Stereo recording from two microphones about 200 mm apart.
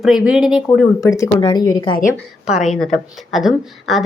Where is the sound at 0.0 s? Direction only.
Centre (ahead or behind).